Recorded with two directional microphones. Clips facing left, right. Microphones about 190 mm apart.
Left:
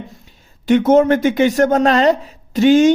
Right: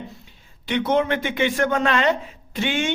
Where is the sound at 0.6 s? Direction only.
45° left (ahead or behind).